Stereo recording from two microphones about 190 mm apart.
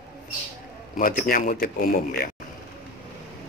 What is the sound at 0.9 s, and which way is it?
A man's voice, 45° left (ahead or behind).